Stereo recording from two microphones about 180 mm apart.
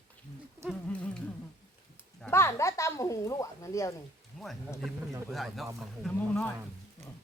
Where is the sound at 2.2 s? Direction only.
15° left (ahead or behind).